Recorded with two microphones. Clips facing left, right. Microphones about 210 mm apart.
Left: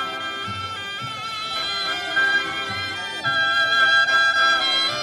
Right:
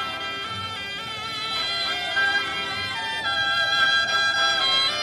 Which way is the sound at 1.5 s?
50° left (ahead or behind).